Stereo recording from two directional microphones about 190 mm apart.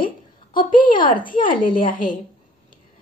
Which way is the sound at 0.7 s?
25° left (ahead or behind).